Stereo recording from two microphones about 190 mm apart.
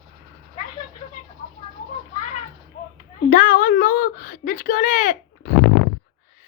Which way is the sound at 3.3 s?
45° left (ahead or behind).